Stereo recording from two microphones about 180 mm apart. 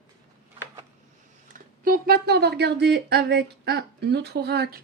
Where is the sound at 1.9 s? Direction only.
60° right (ahead or behind).